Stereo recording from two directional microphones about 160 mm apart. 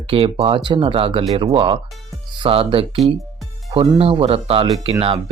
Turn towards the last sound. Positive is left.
turn(degrees=-35)  # may be behind; listen again after turning